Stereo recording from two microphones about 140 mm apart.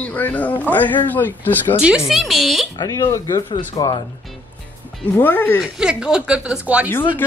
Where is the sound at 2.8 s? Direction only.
25° left (ahead or behind).